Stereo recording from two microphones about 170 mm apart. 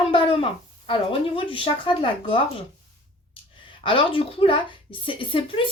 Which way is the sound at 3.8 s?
30° left (ahead or behind).